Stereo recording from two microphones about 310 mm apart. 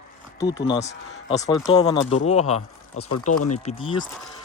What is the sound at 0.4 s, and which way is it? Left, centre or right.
Speech, centre.